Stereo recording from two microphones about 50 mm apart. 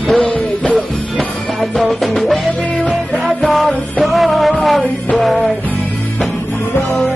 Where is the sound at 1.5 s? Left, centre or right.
Centre.